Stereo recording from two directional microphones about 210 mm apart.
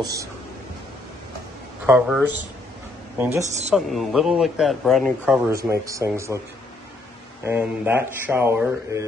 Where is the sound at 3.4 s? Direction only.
35° right (ahead or behind).